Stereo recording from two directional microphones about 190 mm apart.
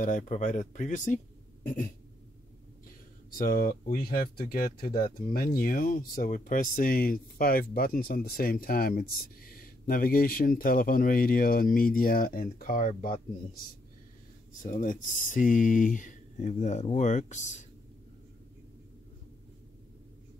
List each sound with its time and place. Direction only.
0.0 s speech: 40° left (ahead or behind)
3.3 s speech: 45° left (ahead or behind)
14.6 s speech: 45° left (ahead or behind)